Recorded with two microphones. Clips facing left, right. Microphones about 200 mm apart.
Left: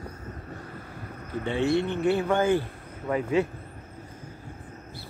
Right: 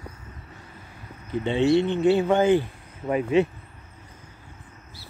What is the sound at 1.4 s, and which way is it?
Speech, 25° right (ahead or behind).